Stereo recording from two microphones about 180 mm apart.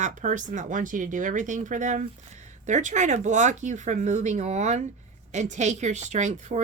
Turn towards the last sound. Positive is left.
turn(degrees=-40)  # may be behind; listen again after turning